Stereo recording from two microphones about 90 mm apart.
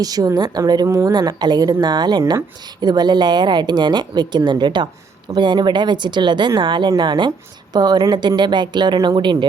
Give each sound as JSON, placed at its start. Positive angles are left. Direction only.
{"t": 0.0, "sound": "a woman's voice", "side_deg": -45}